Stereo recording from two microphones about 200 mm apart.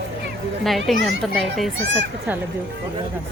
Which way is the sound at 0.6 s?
Centre (ahead or behind).